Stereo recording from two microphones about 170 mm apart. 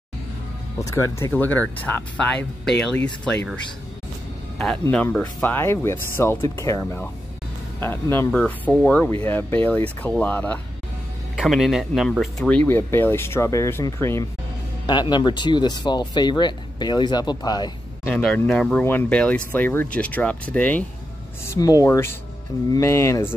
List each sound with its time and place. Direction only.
0.7 s speech: 20° left (ahead or behind)
4.8 s speech: 10° left (ahead or behind)
18.1 s speech: 5° left (ahead or behind)
21.5 s speech: 20° left (ahead or behind)